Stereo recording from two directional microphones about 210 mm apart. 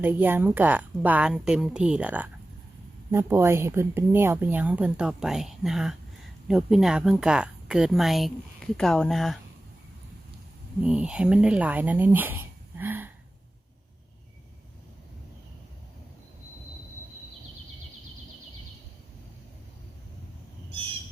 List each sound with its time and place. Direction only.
0.0 s a woman's voice: 10° right (ahead or behind)
10.8 s speech: 5° right (ahead or behind)